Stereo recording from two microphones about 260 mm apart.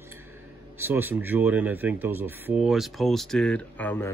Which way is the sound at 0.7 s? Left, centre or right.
Centre.